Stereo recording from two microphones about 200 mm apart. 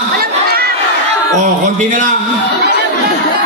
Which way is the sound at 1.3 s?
40° right (ahead or behind).